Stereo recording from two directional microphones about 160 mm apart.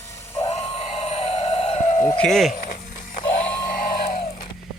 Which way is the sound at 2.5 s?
45° left (ahead or behind).